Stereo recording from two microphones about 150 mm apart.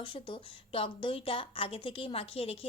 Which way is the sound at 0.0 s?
35° left (ahead or behind).